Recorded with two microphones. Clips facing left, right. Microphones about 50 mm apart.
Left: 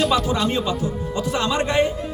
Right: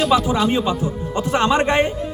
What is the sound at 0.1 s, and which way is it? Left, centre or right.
Speech, centre.